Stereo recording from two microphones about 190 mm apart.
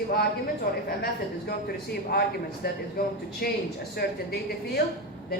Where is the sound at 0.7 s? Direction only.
50° left (ahead or behind).